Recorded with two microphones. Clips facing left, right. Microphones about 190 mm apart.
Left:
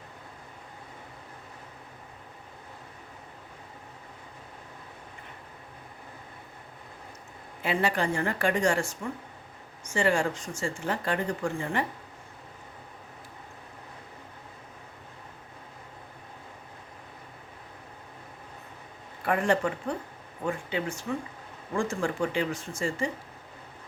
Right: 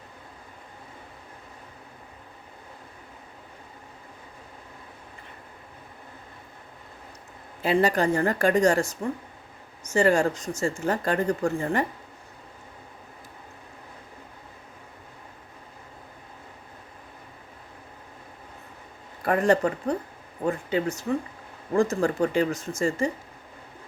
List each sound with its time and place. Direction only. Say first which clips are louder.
7.6 s speech: right 5 dB; 40° right (ahead or behind)
19.2 s speech: right 4 dB; 40° right (ahead or behind)